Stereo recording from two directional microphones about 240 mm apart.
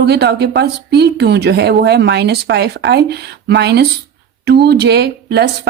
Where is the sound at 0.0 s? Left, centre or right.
Right.